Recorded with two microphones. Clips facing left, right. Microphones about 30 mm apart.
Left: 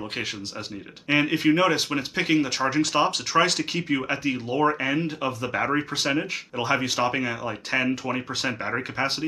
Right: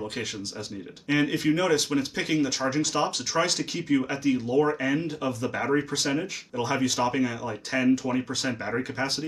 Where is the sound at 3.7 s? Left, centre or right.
Left.